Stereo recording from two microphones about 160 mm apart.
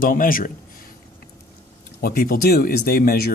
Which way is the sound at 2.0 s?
70° left (ahead or behind).